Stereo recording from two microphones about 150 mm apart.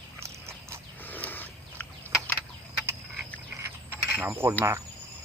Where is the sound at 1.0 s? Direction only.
10° left (ahead or behind).